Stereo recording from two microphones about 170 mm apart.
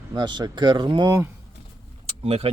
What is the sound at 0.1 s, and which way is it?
Speech, 25° right (ahead or behind).